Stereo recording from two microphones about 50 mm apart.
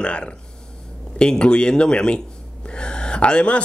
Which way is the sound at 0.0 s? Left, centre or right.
Left.